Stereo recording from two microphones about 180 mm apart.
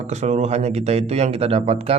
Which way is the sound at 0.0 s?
40° right (ahead or behind).